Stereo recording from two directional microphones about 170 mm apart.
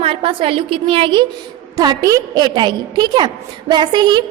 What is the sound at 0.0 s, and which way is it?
A woman's voice, 30° right (ahead or behind).